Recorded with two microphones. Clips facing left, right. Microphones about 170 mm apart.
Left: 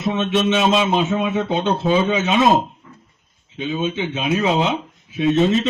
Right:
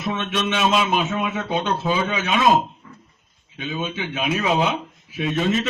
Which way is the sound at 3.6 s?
25° left (ahead or behind).